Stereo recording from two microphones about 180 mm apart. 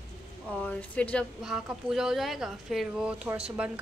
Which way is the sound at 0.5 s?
10° left (ahead or behind).